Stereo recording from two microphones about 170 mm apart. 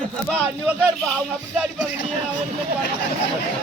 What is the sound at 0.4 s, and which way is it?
Speech, 10° right (ahead or behind).